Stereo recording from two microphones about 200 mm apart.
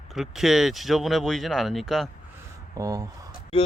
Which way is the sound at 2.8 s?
15° right (ahead or behind).